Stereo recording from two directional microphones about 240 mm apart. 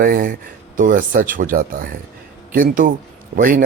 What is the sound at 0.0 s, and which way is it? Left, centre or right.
Speech, right.